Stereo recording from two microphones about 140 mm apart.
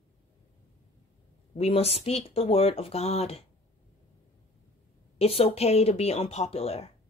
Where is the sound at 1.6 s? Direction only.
45° left (ahead or behind).